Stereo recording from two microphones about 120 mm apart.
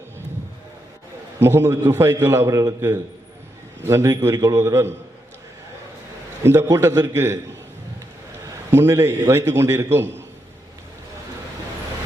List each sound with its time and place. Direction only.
1.4 s a man's voice: 20° right (ahead or behind)
6.4 s a man's voice: 25° right (ahead or behind)
8.7 s a man's voice: 20° right (ahead or behind)